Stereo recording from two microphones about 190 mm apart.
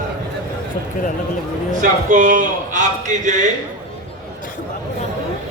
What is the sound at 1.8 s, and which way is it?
A man's voice, 45° right (ahead or behind).